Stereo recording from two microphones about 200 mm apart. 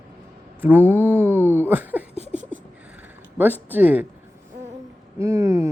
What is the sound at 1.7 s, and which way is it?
Speech, 10° right (ahead or behind).